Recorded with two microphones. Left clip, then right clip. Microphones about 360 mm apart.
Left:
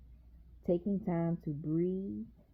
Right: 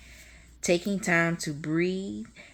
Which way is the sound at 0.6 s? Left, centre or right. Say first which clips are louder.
Right 8 dB; centre.